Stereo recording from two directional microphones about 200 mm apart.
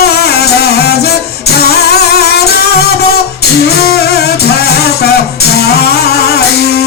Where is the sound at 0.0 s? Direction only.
55° left (ahead or behind).